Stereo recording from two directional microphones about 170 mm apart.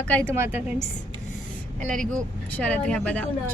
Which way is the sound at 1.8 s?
50° right (ahead or behind).